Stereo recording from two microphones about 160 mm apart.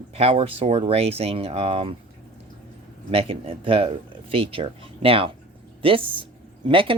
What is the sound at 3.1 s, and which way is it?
Speech, 35° right (ahead or behind).